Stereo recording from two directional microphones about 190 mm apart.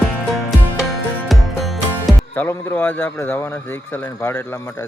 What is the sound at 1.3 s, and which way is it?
Music, centre (ahead or behind).